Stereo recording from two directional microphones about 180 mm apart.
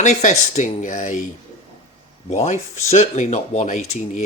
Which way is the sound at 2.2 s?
40° left (ahead or behind).